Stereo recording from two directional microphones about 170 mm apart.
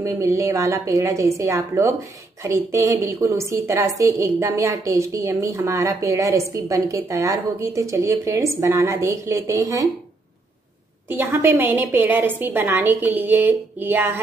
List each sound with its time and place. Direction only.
0.0 s a woman's voice: 15° right (ahead or behind)
11.1 s a woman's voice: 10° right (ahead or behind)